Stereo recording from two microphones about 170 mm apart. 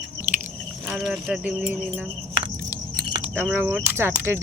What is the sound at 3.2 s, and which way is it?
Keys jangling, 10° right (ahead or behind).